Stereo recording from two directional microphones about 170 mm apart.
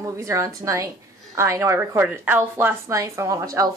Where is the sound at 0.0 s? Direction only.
15° right (ahead or behind).